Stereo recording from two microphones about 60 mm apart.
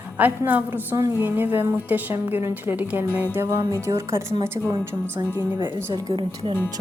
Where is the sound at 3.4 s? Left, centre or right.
Right.